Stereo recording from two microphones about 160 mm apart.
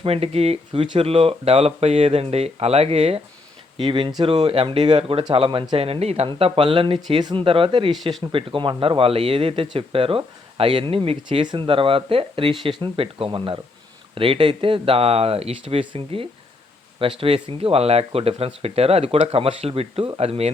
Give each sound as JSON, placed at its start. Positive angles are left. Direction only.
{"t": 0.0, "sound": "speech", "side_deg": -40}